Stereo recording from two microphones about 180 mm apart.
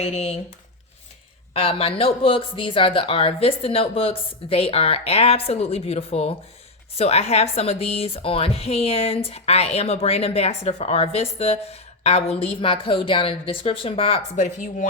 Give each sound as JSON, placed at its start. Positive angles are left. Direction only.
{"t": 0.0, "sound": "speech", "side_deg": 35}
{"t": 1.5, "sound": "speech", "side_deg": 30}